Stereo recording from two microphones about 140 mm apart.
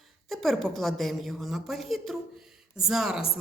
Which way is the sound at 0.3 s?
Centre (ahead or behind).